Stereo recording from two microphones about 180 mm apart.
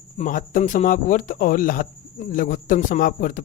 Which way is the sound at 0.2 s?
50° left (ahead or behind).